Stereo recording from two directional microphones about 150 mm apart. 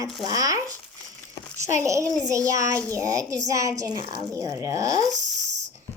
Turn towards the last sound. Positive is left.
turn(degrees=-55)  # may be behind; listen again after turning